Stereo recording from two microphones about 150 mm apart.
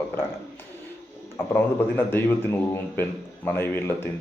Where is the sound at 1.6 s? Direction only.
15° left (ahead or behind).